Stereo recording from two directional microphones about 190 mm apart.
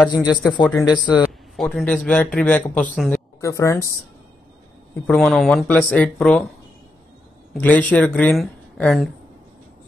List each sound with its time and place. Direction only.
0.1 s a man's voice: 5° right (ahead or behind); by 3.8 s 15° left (ahead or behind)
5.0 s a man's voice: centre (ahead or behind)
7.5 s speech: 5° left (ahead or behind)